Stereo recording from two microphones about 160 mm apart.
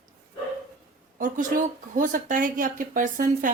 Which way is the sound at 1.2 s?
55° right (ahead or behind).